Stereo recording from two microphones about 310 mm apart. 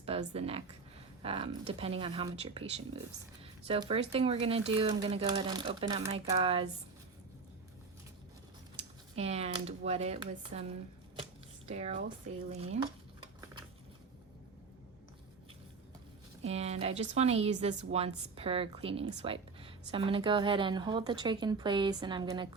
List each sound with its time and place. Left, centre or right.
0.0 s a woman's voice: centre
9.1 s speech: centre
16.5 s a woman's voice: centre